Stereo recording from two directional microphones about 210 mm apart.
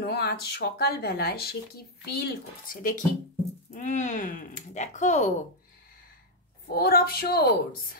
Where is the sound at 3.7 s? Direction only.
35° left (ahead or behind).